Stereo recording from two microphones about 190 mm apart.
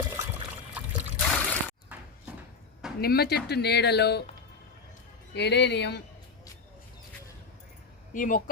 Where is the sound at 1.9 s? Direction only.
10° right (ahead or behind).